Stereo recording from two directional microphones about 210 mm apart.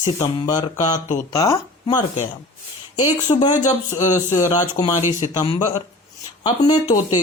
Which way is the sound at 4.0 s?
15° left (ahead or behind).